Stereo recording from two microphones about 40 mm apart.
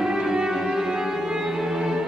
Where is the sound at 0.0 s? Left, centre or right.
Centre.